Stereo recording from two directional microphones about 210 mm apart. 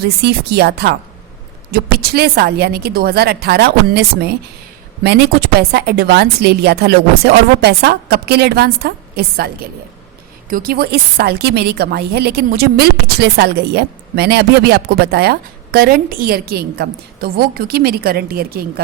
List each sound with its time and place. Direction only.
0.0 s a woman's voice: 50° right (ahead or behind)